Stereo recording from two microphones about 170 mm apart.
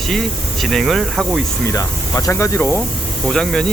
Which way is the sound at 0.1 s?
Centre (ahead or behind).